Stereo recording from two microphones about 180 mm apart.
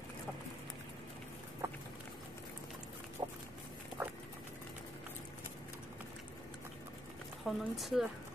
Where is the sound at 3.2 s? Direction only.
20° right (ahead or behind).